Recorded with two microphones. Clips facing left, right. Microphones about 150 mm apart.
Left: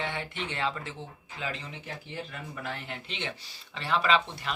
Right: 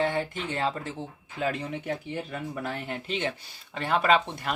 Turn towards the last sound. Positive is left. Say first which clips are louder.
# right 3 dB
turn(degrees=-50)  # may be behind; listen again after turning